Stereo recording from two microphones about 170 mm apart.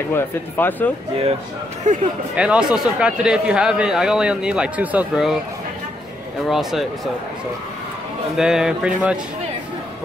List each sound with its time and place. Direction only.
0.1 s speech: 10° left (ahead or behind)
1.9 s a man's voice: 45° right (ahead or behind)
2.3 s speech: 5° right (ahead or behind)
6.5 s speech: centre (ahead or behind)
8.4 s speech: 5° right (ahead or behind)